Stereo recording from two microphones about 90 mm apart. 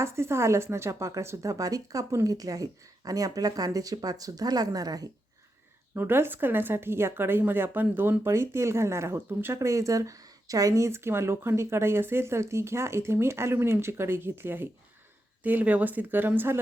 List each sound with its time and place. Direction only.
0.0 s speech: 30° right (ahead or behind)
5.9 s speech: 25° right (ahead or behind)